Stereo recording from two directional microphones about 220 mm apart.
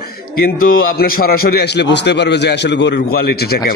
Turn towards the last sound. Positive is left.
turn(degrees=50)  # may be behind; listen again after turning